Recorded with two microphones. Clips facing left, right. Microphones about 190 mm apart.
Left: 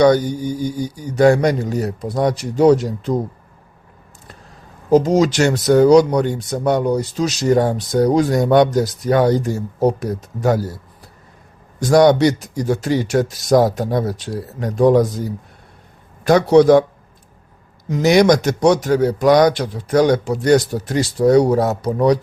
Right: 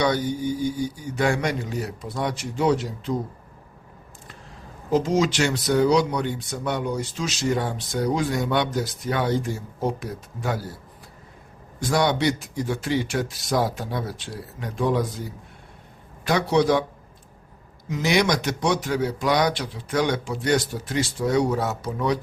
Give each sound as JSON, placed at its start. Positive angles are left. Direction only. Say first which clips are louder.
{"t": 0.0, "sound": "speech", "louder": "left 9 dB", "side_deg": 40}
{"t": 4.9, "sound": "speech", "louder": "left 8 dB", "side_deg": 40}
{"t": 11.8, "sound": "a man's voice", "louder": "left 10 dB", "side_deg": 40}
{"t": 17.8, "sound": "speech", "louder": "left 9 dB", "side_deg": 40}